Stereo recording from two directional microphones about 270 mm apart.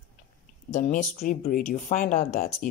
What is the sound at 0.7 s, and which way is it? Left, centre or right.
Speech, left.